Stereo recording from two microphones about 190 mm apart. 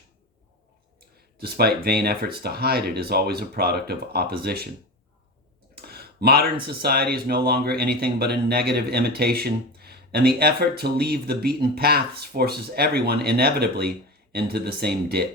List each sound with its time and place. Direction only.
1.4 s speech: 55° right (ahead or behind)
5.7 s speech: 55° right (ahead or behind)